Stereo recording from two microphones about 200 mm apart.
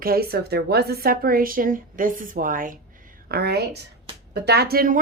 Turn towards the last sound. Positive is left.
turn(degrees=-50)  # may be behind; listen again after turning